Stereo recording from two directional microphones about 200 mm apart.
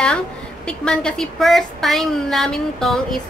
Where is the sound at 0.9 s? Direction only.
5° left (ahead or behind).